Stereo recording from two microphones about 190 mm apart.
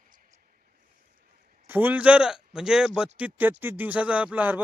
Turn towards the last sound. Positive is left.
turn(degrees=-10)  # may be behind; listen again after turning